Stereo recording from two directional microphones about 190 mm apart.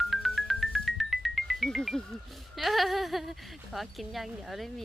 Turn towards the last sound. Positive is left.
turn(degrees=0)  # may be behind; listen again after turning